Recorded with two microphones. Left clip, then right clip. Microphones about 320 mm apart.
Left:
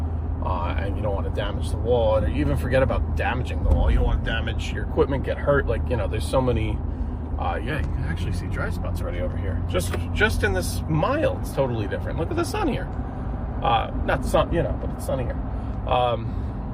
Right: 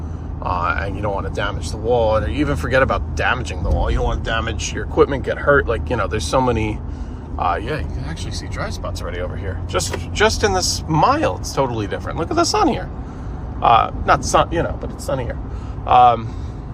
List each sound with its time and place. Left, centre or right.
0.4 s vehicle: right
2.0 s speech: right
9.7 s speech: right
15.9 s speech: right